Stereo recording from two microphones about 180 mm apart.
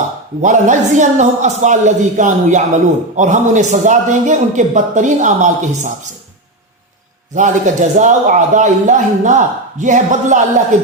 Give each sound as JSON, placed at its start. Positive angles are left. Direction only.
{"t": 0.4, "sound": "a man's voice", "side_deg": -45}
{"t": 7.3, "sound": "a man's voice", "side_deg": -45}